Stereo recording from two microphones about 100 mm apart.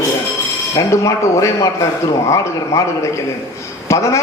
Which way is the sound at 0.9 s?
30° left (ahead or behind).